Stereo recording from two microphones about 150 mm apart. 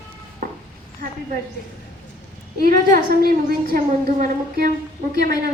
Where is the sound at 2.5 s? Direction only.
75° right (ahead or behind).